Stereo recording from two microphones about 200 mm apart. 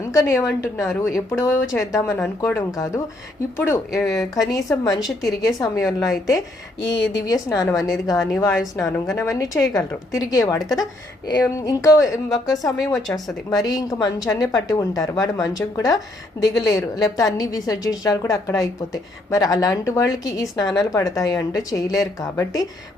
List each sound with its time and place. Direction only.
0.0 s a woman's voice: 15° left (ahead or behind)
6.9 s a woman's voice: 65° left (ahead or behind)
7.2 s speech: 15° left (ahead or behind)